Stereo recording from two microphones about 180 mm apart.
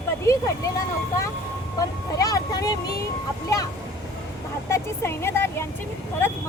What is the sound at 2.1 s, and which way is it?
Speech, 20° left (ahead or behind).